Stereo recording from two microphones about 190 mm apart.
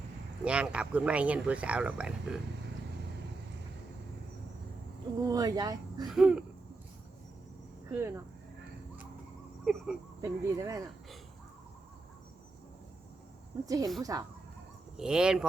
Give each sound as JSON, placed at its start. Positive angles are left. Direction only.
{"t": 0.4, "sound": "speech", "side_deg": -5}
{"t": 5.2, "sound": "speech", "side_deg": -20}
{"t": 6.1, "sound": "speech", "side_deg": -5}
{"t": 7.9, "sound": "speech", "side_deg": -15}
{"t": 9.6, "sound": "a sound", "side_deg": 0}
{"t": 10.2, "sound": "speech", "side_deg": -15}
{"t": 13.7, "sound": "speech", "side_deg": -20}
{"t": 14.9, "sound": "speech", "side_deg": -5}